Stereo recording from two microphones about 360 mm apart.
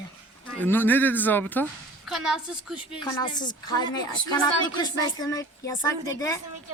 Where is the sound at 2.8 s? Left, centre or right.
Centre.